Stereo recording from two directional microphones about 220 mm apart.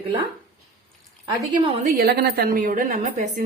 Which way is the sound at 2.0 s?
45° right (ahead or behind).